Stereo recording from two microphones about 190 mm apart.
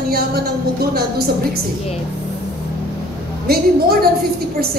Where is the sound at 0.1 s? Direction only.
55° right (ahead or behind).